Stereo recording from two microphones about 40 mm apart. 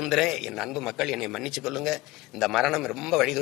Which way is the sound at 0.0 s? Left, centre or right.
Centre.